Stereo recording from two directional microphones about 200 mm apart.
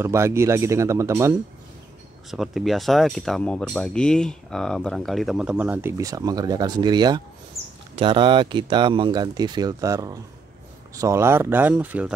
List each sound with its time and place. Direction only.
0.0 s speech: 15° right (ahead or behind)
2.3 s speech: centre (ahead or behind); by 7.2 s 20° right (ahead or behind)
7.6 s bird: 30° right (ahead or behind)
7.9 s speech: 25° right (ahead or behind); by 12.1 s 10° right (ahead or behind)